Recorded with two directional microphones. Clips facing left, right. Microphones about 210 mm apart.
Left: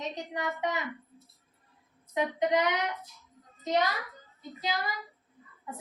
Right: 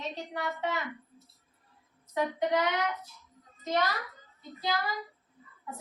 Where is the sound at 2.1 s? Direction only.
20° left (ahead or behind).